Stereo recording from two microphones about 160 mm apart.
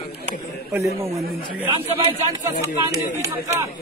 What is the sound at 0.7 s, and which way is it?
Speech, 20° right (ahead or behind).